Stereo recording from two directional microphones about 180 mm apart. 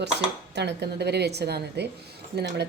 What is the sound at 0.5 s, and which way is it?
A woman's voice, 70° right (ahead or behind).